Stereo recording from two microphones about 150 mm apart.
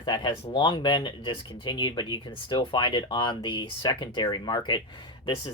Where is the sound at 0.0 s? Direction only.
30° left (ahead or behind).